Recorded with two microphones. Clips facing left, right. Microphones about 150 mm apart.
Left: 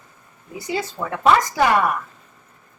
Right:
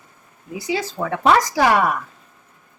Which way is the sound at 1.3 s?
90° right.